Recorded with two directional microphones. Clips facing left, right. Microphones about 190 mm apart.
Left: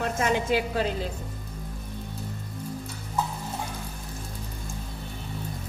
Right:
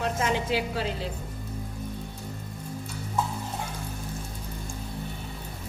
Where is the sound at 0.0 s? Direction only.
50° left (ahead or behind).